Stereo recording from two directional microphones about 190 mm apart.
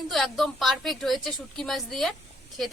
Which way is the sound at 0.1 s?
Centre (ahead or behind).